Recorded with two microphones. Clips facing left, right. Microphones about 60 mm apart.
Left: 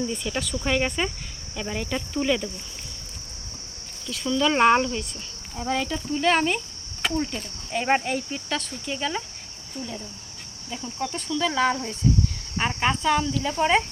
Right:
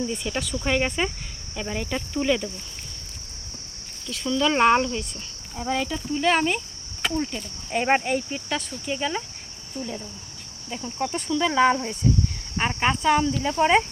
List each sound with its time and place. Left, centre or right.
0.0 s speech: centre
4.0 s speech: centre
7.7 s speech: centre